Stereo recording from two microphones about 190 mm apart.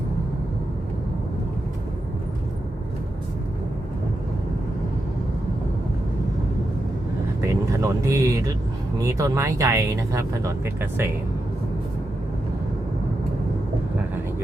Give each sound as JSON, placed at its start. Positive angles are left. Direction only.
{"t": 7.4, "sound": "vehicle", "side_deg": -15}
{"t": 9.0, "sound": "speech", "side_deg": -15}